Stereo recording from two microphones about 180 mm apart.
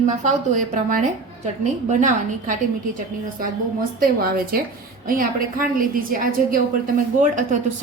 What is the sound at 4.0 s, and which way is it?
A woman's voice, 55° right (ahead or behind).